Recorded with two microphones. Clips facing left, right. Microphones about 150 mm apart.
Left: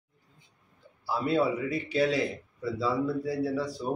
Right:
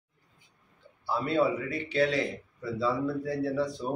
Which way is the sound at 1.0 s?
10° left (ahead or behind).